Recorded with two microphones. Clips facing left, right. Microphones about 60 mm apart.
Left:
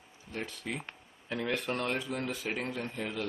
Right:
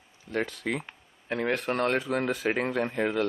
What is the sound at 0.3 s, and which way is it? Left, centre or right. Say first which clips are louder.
Speech: right 8 dB; right.